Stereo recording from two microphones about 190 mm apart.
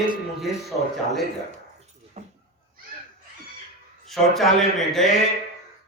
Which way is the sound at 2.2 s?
35° right (ahead or behind).